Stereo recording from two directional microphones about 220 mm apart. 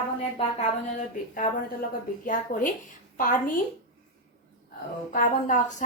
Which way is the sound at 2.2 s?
40° left (ahead or behind).